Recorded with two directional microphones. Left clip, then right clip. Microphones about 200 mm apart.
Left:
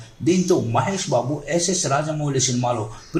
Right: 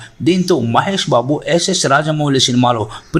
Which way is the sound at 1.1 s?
50° right (ahead or behind).